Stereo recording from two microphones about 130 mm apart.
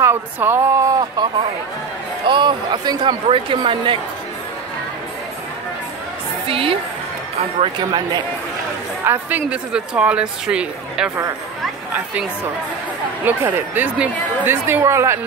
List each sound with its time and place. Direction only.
0.0 s speech: 15° right (ahead or behind)
2.2 s speech: 40° right (ahead or behind)
6.4 s a woman's voice: 45° right (ahead or behind)
7.6 s speech: 35° right (ahead or behind)
9.0 s speech: 15° right (ahead or behind)
13.2 s speech: 15° right (ahead or behind)